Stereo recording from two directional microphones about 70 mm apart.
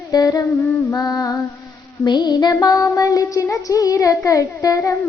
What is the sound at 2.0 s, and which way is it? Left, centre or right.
Female singing, left.